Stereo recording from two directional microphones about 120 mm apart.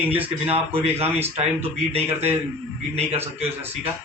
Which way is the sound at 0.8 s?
60° right (ahead or behind).